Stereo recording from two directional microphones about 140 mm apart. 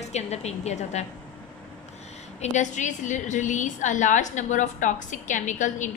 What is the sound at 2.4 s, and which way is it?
A woman's voice, 60° left (ahead or behind).